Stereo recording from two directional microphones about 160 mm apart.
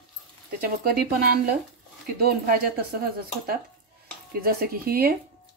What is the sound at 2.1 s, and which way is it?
Speech, 70° right (ahead or behind).